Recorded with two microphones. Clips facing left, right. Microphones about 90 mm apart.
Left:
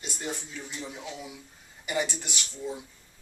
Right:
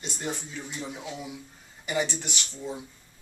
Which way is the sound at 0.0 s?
Centre (ahead or behind).